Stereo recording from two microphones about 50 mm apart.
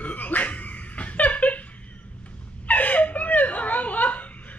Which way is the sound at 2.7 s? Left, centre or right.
Left.